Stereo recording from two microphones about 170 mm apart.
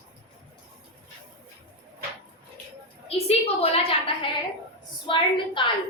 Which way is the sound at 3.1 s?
35° left (ahead or behind).